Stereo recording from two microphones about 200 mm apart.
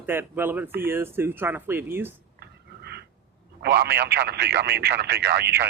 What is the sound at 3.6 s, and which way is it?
Speech, 55° right (ahead or behind).